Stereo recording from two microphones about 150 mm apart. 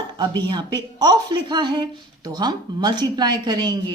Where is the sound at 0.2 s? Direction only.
30° right (ahead or behind).